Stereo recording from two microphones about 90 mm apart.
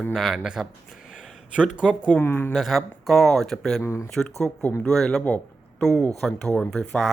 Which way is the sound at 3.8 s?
35° left (ahead or behind).